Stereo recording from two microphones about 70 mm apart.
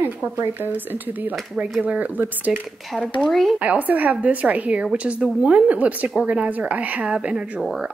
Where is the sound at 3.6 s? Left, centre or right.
Right.